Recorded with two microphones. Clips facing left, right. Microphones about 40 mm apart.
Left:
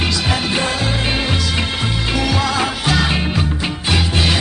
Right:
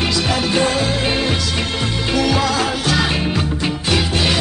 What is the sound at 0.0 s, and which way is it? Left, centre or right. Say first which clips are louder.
Music: right 1 dB; centre.